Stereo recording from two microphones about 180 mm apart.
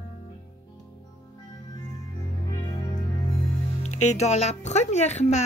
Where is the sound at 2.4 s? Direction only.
20° left (ahead or behind).